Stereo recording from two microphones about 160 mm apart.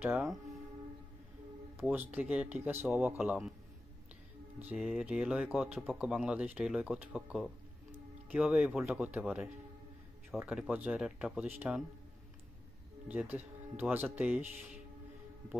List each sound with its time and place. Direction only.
0.0 s speech: 5° right (ahead or behind)
1.8 s speech: 10° right (ahead or behind)
4.6 s speech: 5° right (ahead or behind)
13.1 s speech: 10° right (ahead or behind)